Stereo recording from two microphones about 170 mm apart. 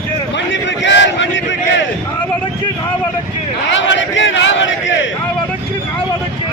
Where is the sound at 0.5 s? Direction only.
90° left.